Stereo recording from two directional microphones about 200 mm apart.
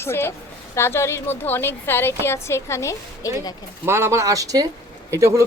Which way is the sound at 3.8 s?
15° right (ahead or behind).